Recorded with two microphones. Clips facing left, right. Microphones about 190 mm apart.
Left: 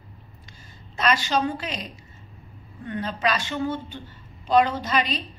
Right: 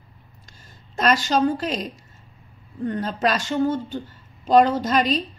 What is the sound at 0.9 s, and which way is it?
A woman's voice, 45° right (ahead or behind).